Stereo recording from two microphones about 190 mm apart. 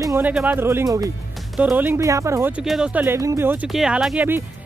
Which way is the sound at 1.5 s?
5° right (ahead or behind).